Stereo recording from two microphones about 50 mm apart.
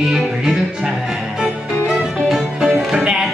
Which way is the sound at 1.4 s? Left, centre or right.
Centre.